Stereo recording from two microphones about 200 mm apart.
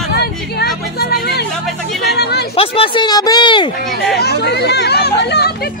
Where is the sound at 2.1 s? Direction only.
55° left (ahead or behind).